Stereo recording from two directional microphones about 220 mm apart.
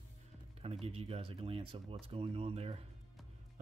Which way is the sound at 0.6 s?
25° right (ahead or behind).